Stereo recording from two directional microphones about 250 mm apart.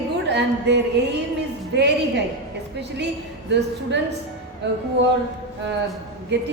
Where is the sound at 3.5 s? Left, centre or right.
Right.